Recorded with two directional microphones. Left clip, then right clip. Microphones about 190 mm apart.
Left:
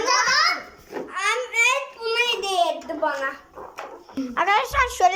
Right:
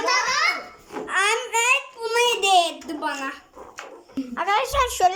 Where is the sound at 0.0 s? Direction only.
20° right (ahead or behind).